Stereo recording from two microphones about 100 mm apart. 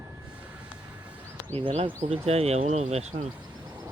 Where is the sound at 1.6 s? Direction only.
80° right.